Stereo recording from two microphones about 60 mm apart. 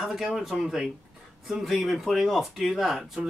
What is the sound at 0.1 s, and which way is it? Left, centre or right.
Speech, centre.